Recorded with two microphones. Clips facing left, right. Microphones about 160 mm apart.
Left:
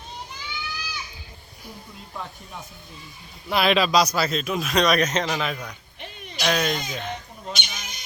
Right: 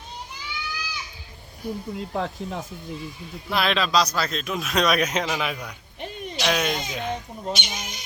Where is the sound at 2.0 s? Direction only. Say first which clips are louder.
Right 6 dB; 90° right.